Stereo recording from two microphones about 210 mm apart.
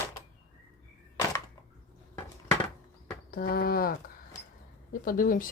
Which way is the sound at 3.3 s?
45° left (ahead or behind).